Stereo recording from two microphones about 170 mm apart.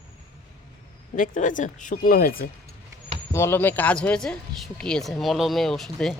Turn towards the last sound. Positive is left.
turn(degrees=5)  # may be behind; listen again after turning